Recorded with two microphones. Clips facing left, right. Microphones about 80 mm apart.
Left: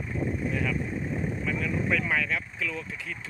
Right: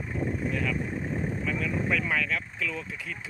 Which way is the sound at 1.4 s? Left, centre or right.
Centre.